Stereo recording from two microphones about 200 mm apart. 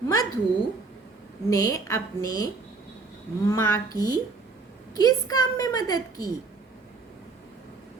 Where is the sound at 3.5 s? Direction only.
15° left (ahead or behind).